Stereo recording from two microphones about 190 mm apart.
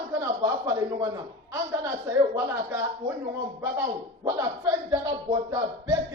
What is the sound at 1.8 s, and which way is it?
Speech, 15° right (ahead or behind).